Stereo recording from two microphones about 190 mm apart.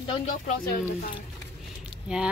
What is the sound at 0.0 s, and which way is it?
Speech, 30° left (ahead or behind).